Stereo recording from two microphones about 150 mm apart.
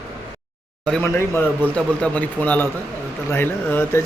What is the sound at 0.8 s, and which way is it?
Speech, 10° left (ahead or behind).